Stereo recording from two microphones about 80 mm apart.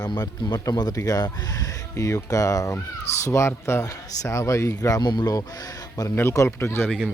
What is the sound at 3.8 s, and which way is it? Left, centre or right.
Speech, left.